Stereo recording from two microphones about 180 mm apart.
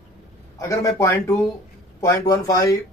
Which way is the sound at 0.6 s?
15° left (ahead or behind).